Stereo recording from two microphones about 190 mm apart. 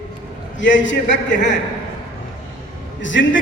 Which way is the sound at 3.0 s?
75° left (ahead or behind).